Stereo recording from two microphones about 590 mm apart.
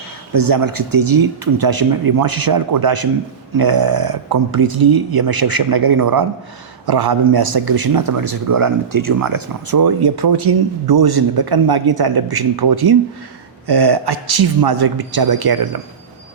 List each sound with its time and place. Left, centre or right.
0.3 s speech: right